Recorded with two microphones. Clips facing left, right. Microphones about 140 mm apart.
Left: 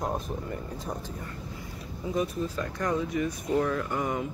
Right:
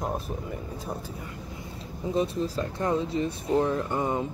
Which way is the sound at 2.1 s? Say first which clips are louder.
Right 3 dB; 30° right (ahead or behind).